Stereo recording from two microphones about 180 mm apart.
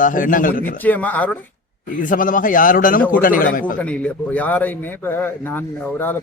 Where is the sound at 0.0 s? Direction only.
50° left (ahead or behind).